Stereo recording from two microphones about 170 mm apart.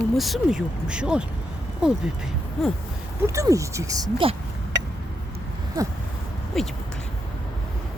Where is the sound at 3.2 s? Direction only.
20° right (ahead or behind).